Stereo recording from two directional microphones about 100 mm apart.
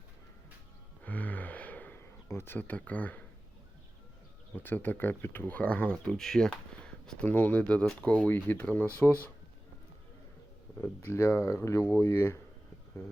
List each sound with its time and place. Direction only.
1.0 s gasp: 15° left (ahead or behind)
4.5 s speech: 20° left (ahead or behind)
10.8 s speech: 20° left (ahead or behind)